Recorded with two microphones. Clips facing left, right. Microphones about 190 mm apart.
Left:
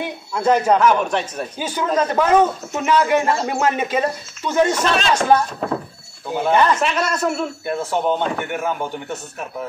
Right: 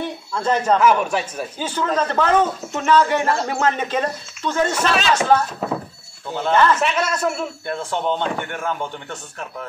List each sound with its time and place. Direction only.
0.0 s a man's voice: 10° left (ahead or behind)
0.7 s speech: 5° right (ahead or behind)
1.6 s a man's voice: 10° left (ahead or behind)
4.7 s speech: centre (ahead or behind)
6.3 s a man's voice: 15° left (ahead or behind)
6.8 s speech: 5° right (ahead or behind)
7.6 s a man's voice: 5° left (ahead or behind)